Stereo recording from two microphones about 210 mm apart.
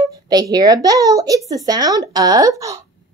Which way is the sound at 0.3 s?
20° right (ahead or behind).